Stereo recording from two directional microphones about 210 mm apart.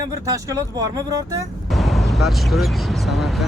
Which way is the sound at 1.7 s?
Centre (ahead or behind).